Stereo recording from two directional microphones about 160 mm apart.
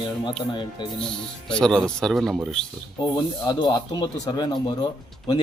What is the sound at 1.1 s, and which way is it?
Speech, 5° left (ahead or behind).